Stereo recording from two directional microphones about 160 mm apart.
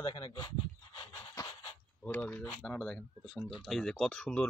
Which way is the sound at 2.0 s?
10° left (ahead or behind).